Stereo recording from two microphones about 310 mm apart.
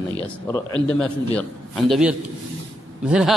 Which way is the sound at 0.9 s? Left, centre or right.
Centre.